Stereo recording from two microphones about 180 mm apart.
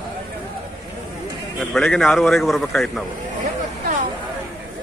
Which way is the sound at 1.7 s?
Centre (ahead or behind).